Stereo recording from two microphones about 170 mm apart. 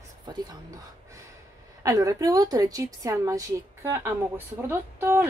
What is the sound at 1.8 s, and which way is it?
Speech, 20° right (ahead or behind).